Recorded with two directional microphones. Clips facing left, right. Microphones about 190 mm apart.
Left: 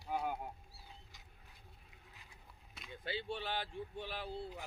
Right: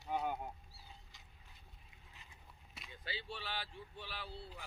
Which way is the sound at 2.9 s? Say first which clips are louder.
Left 6 dB; 55° left (ahead or behind).